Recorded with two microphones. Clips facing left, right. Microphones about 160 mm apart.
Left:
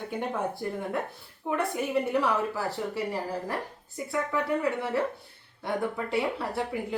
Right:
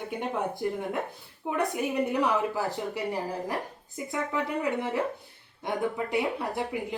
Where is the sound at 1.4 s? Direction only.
10° right (ahead or behind).